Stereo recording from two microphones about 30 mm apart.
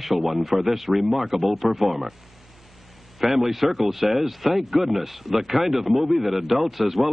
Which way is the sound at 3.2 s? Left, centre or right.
Centre.